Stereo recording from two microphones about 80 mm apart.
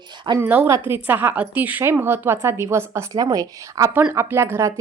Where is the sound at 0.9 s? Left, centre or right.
Right.